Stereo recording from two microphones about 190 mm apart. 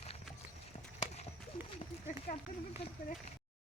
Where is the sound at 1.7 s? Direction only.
30° left (ahead or behind).